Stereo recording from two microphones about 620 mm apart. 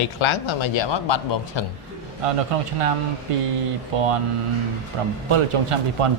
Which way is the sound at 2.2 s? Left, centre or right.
Right.